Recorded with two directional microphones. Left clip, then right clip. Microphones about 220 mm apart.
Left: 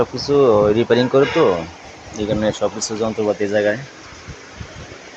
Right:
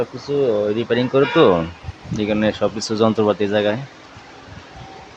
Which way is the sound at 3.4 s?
15° right (ahead or behind).